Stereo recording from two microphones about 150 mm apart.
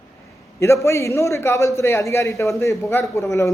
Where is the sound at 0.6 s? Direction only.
20° left (ahead or behind).